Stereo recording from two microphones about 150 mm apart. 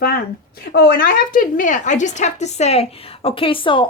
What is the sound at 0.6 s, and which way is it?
A woman's voice, 90° left.